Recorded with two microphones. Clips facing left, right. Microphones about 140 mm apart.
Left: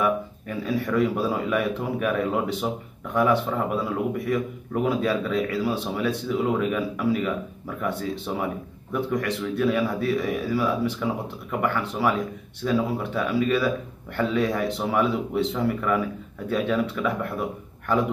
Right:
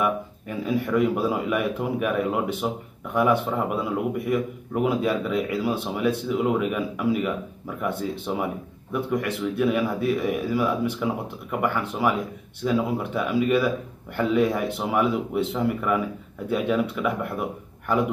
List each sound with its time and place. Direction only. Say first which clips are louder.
0.0 s a man's voice: left 1 dB; 10° right (ahead or behind)